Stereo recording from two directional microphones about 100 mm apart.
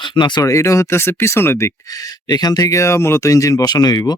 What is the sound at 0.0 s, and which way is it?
Speech, 50° left (ahead or behind).